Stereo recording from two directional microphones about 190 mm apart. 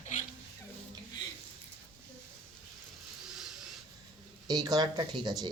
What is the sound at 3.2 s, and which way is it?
Vehicle, centre (ahead or behind).